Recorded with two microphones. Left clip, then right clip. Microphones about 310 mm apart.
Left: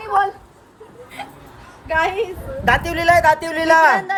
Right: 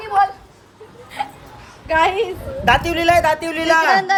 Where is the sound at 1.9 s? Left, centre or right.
Right.